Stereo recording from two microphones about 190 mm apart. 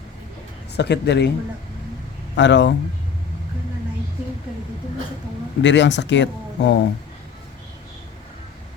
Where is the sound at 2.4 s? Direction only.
70° left (ahead or behind).